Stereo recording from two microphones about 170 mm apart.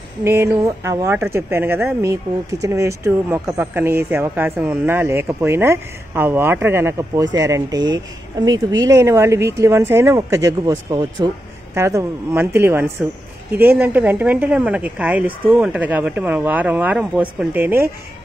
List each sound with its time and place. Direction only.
0.2 s speech: 15° right (ahead or behind)